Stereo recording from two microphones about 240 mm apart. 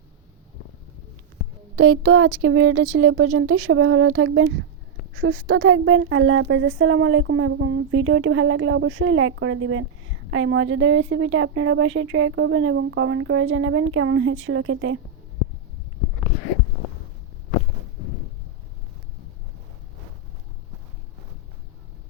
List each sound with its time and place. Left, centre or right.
1.7 s a woman's voice: right